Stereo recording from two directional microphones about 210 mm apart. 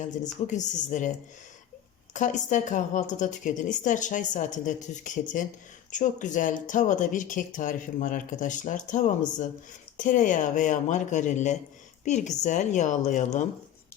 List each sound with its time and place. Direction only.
0.0 s a woman's voice: 35° left (ahead or behind)
2.1 s a woman's voice: 35° left (ahead or behind)
10.0 s a woman's voice: 40° left (ahead or behind)